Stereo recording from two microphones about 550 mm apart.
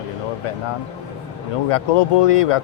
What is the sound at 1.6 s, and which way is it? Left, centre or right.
Speech, left.